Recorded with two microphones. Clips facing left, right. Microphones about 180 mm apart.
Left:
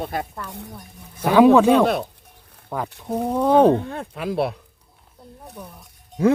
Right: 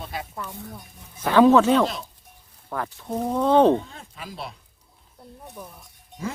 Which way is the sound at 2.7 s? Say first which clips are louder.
Left 3 dB; 15° left (ahead or behind).